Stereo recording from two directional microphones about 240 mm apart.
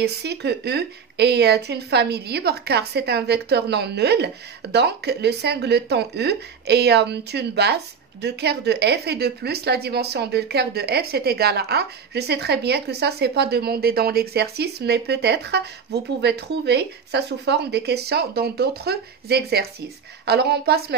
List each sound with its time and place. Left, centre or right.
0.0 s a woman's voice: right